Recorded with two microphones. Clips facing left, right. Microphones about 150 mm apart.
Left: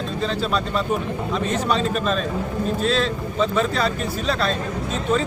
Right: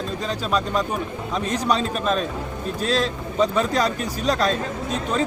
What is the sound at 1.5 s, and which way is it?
Speech, 40° right (ahead or behind).